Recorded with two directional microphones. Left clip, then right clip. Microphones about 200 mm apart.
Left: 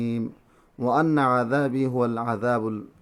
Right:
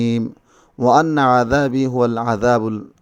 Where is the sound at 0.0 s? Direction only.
40° right (ahead or behind).